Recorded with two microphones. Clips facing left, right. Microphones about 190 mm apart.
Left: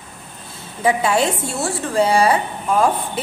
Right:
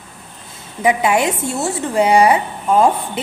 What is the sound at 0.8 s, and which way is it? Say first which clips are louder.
A woman's voice: right 2 dB; 15° right (ahead or behind).